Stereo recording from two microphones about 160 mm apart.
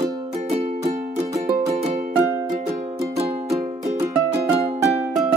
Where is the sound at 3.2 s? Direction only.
30° right (ahead or behind).